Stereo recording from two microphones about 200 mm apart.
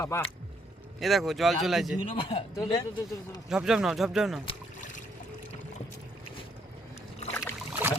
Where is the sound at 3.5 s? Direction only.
5° right (ahead or behind).